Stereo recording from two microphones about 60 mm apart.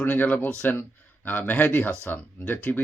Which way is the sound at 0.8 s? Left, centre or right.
Left.